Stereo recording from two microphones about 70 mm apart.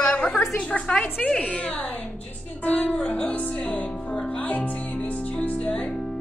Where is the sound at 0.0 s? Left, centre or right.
Centre.